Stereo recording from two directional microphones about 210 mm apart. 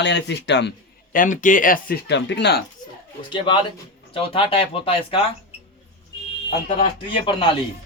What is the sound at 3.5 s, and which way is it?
A man's voice, 20° left (ahead or behind).